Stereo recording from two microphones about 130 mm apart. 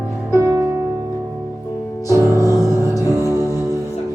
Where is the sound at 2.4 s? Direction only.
25° right (ahead or behind).